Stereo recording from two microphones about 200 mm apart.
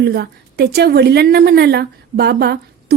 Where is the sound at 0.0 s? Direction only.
55° right (ahead or behind).